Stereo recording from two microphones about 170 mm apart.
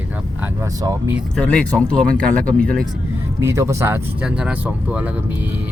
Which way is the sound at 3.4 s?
15° right (ahead or behind).